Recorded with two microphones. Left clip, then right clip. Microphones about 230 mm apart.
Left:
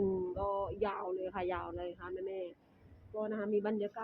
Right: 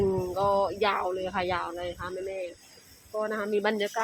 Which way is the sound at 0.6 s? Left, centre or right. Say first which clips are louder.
Right 11 dB; centre.